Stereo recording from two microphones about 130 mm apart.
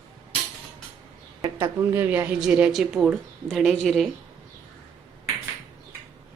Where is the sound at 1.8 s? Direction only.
20° right (ahead or behind); by 4.1 s centre (ahead or behind).